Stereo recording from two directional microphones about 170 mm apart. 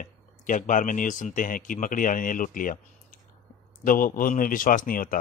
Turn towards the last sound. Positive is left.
turn(degrees=55)  # may be behind; listen again after turning